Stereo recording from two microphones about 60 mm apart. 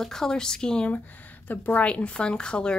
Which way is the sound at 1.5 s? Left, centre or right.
Left.